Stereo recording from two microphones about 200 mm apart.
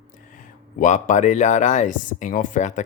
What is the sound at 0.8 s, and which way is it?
Speech, 40° left (ahead or behind).